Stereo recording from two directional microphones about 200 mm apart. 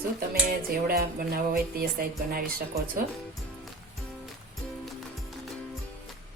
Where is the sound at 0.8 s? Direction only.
50° right (ahead or behind).